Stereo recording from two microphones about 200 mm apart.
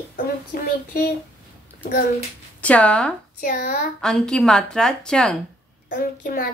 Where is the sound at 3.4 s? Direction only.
50° left (ahead or behind).